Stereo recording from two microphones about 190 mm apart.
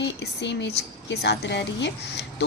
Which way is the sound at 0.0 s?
65° left (ahead or behind).